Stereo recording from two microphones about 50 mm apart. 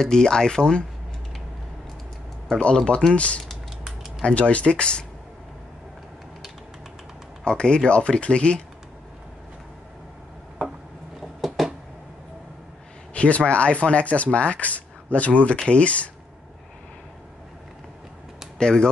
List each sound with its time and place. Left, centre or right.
0.0 s speech: centre
2.6 s speech: centre
7.4 s speech: centre
11.1 s a sound: centre
13.1 s speech: left
18.6 s speech: centre